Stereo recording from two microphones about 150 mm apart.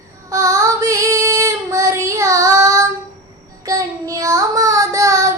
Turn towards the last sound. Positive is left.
turn(degrees=-20)  # may be behind; listen again after turning